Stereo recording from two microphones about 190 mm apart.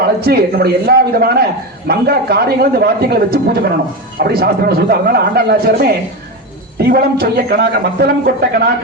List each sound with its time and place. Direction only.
0.2 s a man's voice: 55° right (ahead or behind)